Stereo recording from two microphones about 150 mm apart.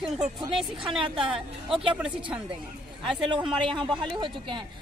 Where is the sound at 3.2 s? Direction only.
35° right (ahead or behind).